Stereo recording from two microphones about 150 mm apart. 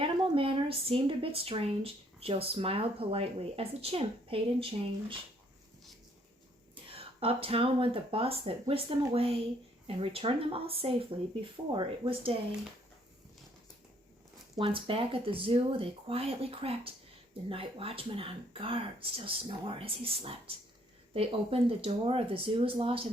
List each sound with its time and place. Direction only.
0.0 s a woman's voice: 35° right (ahead or behind)
6.9 s a woman's voice: 40° right (ahead or behind)
14.5 s a woman's voice: 35° right (ahead or behind)